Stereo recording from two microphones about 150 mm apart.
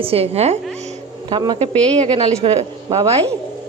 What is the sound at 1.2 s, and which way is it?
A woman's voice, 30° right (ahead or behind).